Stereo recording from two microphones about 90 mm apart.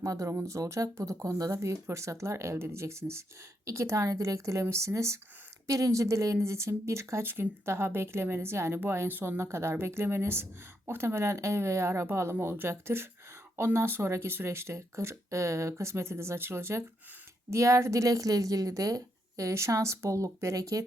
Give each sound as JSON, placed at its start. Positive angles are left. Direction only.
{"t": 0.0, "sound": "a woman's voice", "side_deg": -35}